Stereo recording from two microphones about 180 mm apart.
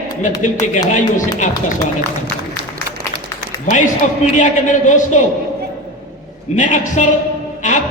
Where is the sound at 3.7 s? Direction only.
45° left (ahead or behind).